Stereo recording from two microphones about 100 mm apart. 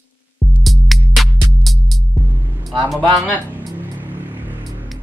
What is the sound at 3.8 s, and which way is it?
Music, 20° right (ahead or behind).